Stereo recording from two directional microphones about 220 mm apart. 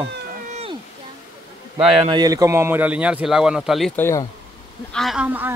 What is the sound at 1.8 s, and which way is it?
Speech, centre (ahead or behind).